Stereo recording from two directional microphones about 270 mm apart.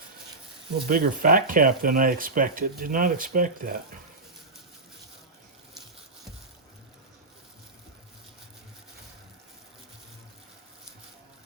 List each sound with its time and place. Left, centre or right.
0.9 s speech: right